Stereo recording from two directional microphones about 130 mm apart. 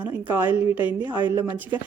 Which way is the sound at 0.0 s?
15° right (ahead or behind).